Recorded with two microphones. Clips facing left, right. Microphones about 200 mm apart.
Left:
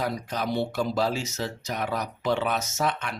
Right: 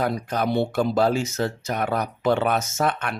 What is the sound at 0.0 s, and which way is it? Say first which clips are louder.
Speech: right 5 dB; 55° right (ahead or behind).